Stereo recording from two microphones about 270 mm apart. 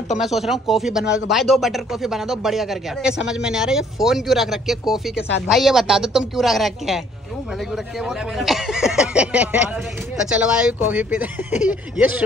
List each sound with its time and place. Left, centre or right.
0.2 s speech: centre